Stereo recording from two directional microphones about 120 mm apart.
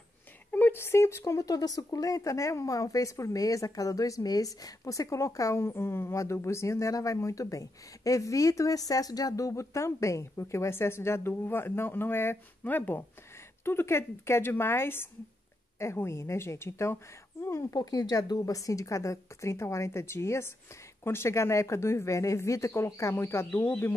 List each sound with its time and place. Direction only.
0.5 s speech: 15° left (ahead or behind)
17.7 s speech: 35° left (ahead or behind); by 23.9 s 15° left (ahead or behind)